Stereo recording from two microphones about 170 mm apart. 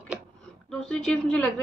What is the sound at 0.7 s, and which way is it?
Speech, 5° left (ahead or behind).